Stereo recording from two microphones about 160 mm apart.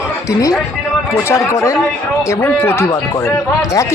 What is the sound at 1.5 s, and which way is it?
A man's voice, 20° left (ahead or behind).